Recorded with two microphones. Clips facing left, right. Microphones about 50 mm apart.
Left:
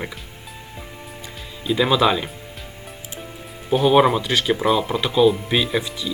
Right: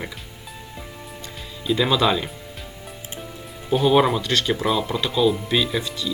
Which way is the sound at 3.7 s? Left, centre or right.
Centre.